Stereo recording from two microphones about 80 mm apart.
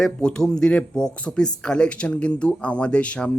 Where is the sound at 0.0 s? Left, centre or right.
Centre.